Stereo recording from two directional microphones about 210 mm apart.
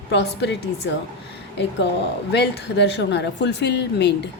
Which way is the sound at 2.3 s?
55° left (ahead or behind).